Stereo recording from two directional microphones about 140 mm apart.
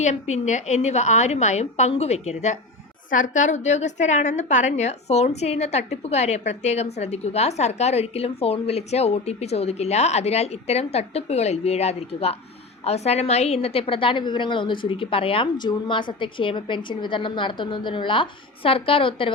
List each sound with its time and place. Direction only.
0.0 s a woman's voice: 55° left (ahead or behind)
3.1 s a woman's voice: 65° left (ahead or behind); by 19.3 s 40° left (ahead or behind)